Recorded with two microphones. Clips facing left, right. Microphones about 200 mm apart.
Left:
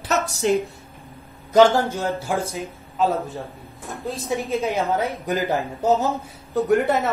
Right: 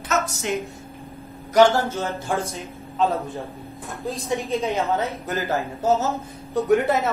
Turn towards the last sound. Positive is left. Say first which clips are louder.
# even
turn(degrees=0)  # may be behind; listen again after turning